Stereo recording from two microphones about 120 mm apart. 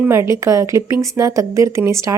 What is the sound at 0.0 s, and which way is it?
Speech, 20° right (ahead or behind).